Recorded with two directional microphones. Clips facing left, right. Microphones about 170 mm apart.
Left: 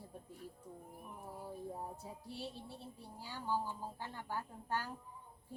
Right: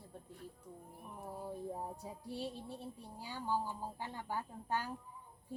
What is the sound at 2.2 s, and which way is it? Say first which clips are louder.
A woman's voice: right 5 dB; 15° right (ahead or behind).